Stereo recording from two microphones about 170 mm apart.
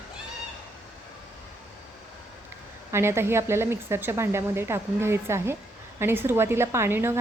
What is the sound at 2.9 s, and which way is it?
Speech, 15° right (ahead or behind).